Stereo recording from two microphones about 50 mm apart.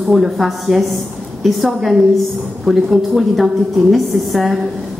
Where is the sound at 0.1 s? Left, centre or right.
Centre.